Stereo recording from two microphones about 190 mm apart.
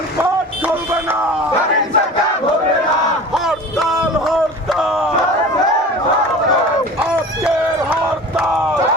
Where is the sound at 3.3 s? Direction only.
Centre (ahead or behind).